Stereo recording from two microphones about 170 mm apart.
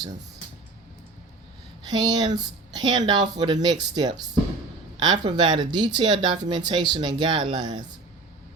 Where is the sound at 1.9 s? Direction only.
25° right (ahead or behind).